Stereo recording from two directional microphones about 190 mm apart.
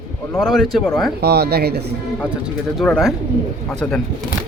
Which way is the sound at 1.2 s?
60° right (ahead or behind).